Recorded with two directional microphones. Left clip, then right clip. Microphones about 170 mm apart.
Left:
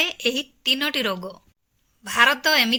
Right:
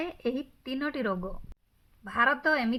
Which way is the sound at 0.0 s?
35° left (ahead or behind).